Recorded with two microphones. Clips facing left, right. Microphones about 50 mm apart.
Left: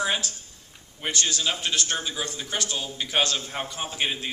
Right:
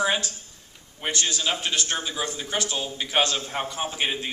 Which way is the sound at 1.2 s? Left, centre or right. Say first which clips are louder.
Even; centre.